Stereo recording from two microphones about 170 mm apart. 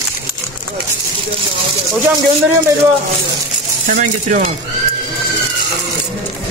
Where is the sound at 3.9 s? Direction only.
55° right (ahead or behind).